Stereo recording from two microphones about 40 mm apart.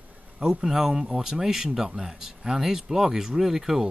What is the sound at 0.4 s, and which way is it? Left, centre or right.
Speech, centre.